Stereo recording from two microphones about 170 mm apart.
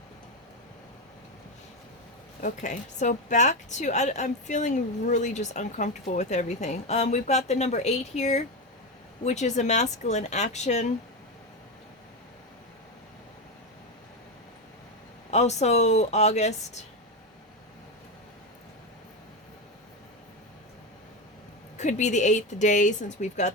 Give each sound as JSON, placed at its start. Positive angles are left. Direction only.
{"t": 2.4, "sound": "a woman's voice", "side_deg": 45}
{"t": 15.3, "sound": "speech", "side_deg": 40}
{"t": 21.8, "sound": "a woman's voice", "side_deg": 45}